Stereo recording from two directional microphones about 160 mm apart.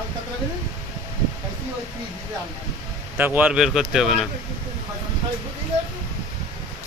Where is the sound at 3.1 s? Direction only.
10° right (ahead or behind).